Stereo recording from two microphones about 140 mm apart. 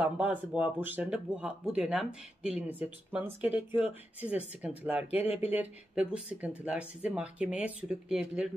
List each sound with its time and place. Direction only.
0.0 s speech: 10° right (ahead or behind)